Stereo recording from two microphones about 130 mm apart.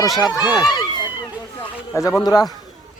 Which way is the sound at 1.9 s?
25° left (ahead or behind).